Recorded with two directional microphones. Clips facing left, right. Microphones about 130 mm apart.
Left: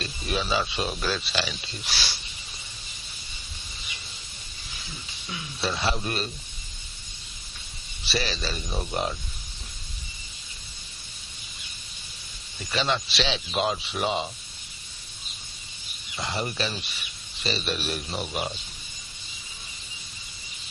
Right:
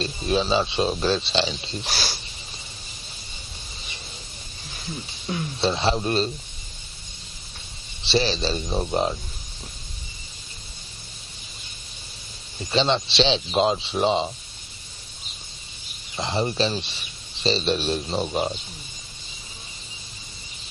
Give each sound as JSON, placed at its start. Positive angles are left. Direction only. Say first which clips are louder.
{"t": 0.0, "sound": "speech", "louder": "right 7 dB", "side_deg": -30}
{"t": 1.9, "sound": "speech", "louder": "right 3 dB", "side_deg": -45}
{"t": 4.9, "sound": "a sound", "louder": "right 10 dB", "side_deg": -45}
{"t": 5.5, "sound": "speech", "louder": "right 5 dB", "side_deg": -25}
{"t": 8.0, "sound": "speech", "louder": "right 7 dB", "side_deg": -30}
{"t": 12.5, "sound": "speech", "louder": "right 5 dB", "side_deg": -25}
{"t": 16.1, "sound": "speech", "louder": "right 6 dB", "side_deg": -25}